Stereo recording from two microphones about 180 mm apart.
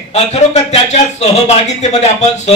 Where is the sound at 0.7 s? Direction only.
40° left (ahead or behind).